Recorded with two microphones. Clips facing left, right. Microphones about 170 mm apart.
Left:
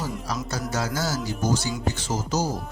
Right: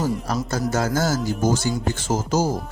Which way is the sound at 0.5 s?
50° right (ahead or behind).